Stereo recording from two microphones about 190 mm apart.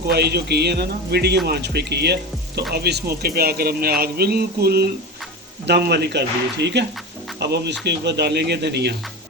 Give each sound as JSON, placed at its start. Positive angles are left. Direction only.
{"t": 0.1, "sound": "speech", "side_deg": -60}